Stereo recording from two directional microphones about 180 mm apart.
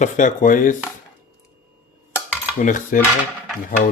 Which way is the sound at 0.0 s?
45° left (ahead or behind).